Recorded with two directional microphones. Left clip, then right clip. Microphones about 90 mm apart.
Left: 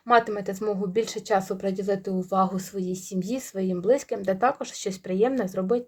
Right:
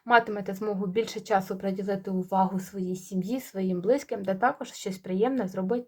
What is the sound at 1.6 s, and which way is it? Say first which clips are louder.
Speech: left 4 dB; 45° left (ahead or behind).